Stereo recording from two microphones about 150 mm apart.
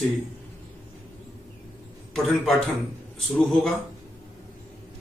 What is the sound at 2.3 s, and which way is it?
A man's voice, centre (ahead or behind).